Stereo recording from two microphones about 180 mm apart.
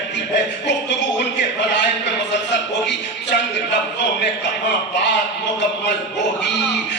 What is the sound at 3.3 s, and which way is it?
Music, 80° left.